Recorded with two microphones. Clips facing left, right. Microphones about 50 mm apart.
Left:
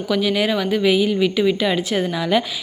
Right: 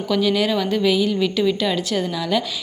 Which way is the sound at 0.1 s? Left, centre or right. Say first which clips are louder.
Even; centre.